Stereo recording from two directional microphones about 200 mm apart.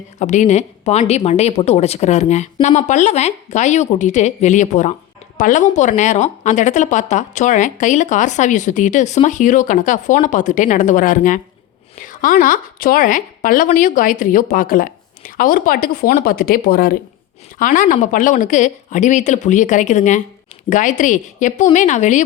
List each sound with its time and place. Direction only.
0.2 s a woman's voice: 35° left (ahead or behind)